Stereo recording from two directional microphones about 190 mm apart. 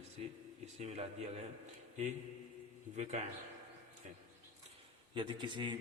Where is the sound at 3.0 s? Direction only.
35° right (ahead or behind).